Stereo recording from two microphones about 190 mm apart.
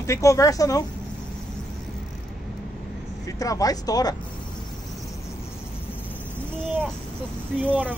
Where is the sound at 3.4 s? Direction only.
20° left (ahead or behind).